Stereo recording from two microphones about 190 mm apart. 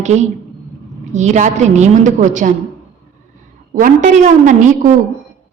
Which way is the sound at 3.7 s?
45° right (ahead or behind).